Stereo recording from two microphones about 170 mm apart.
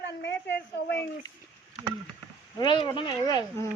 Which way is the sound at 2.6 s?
25° left (ahead or behind).